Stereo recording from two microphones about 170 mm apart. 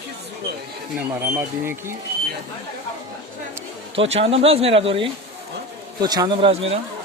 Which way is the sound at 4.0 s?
35° right (ahead or behind).